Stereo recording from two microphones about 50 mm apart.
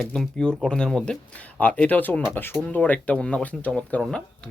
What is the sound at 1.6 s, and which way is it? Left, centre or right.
Speech, left.